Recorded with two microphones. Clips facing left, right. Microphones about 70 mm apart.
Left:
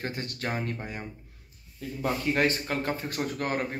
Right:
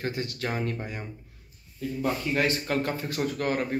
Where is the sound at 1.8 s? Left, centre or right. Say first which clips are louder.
Right 2 dB; left.